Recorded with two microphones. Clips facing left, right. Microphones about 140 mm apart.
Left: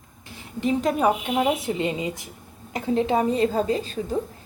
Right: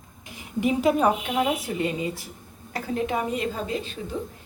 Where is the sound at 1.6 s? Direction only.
25° left (ahead or behind); by 3.9 s 40° left (ahead or behind).